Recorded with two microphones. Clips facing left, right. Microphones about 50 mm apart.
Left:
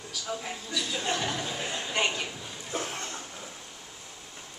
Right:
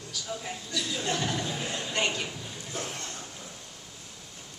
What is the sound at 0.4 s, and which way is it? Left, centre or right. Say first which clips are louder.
Speech: left 1 dB; centre.